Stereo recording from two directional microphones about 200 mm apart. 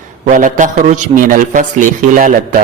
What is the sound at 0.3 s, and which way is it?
A man's voice, 40° right (ahead or behind).